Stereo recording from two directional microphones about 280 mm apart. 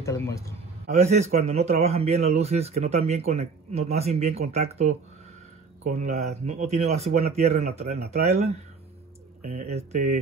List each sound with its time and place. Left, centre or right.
0.0 s a man's voice: centre
0.9 s speech: right
9.4 s speech: right